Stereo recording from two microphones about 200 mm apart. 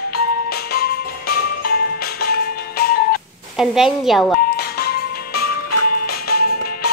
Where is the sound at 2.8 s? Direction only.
50° left (ahead or behind).